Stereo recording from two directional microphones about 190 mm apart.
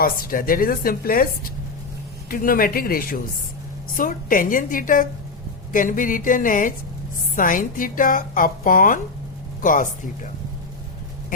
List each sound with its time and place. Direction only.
0.0 s a woman's voice: 50° left (ahead or behind)